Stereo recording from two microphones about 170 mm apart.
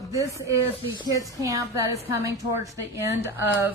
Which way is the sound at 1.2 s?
20° right (ahead or behind).